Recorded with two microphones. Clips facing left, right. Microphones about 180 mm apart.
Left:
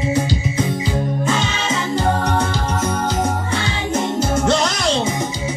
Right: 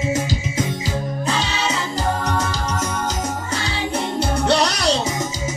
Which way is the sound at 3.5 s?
35° right (ahead or behind).